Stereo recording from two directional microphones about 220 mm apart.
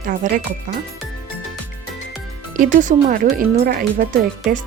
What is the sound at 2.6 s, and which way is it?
Speech, 35° right (ahead or behind).